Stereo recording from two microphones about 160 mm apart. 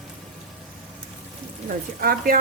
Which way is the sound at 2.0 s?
65° right (ahead or behind).